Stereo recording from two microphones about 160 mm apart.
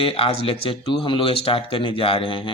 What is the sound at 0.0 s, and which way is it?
Speech, 35° left (ahead or behind).